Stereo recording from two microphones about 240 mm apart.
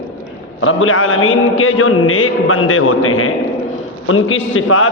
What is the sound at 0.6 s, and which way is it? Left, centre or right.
A man's voice, left.